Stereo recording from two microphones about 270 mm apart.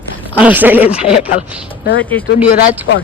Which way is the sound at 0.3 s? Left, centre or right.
Centre.